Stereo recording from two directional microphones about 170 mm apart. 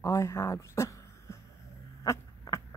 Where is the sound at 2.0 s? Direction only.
15° left (ahead or behind).